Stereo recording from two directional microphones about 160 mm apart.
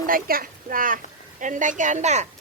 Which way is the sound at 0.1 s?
65° right (ahead or behind).